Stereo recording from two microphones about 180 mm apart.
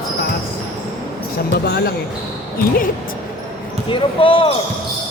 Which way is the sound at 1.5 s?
60° left (ahead or behind).